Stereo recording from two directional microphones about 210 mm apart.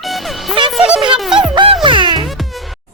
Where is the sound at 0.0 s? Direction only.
Centre (ahead or behind).